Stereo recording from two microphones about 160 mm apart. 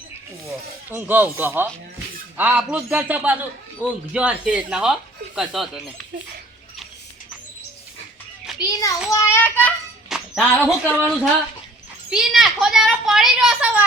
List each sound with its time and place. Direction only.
0.4 s speech: 10° right (ahead or behind)
8.5 s a child's voice: 25° left (ahead or behind)
9.0 s child singing: 20° left (ahead or behind)
10.1 s speech: 5° left (ahead or behind)
12.1 s speech: centre (ahead or behind)